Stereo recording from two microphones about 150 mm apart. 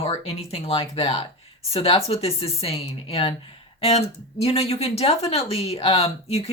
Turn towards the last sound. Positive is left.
turn(degrees=40)  # may be behind; listen again after turning